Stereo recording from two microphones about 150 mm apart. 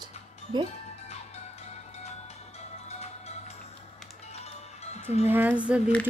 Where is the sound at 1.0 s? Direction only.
45° left (ahead or behind).